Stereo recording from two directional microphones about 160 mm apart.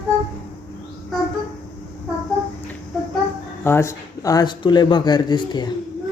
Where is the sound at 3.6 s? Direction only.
15° left (ahead or behind).